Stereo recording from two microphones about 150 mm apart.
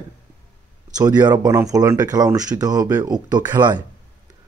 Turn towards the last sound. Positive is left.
turn(degrees=-30)  # may be behind; listen again after turning